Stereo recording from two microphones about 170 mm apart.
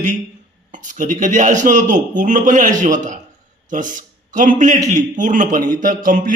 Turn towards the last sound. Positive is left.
turn(degrees=-55)  # may be behind; listen again after turning